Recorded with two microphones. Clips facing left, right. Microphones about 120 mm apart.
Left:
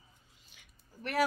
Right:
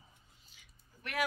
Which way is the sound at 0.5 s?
60° left (ahead or behind).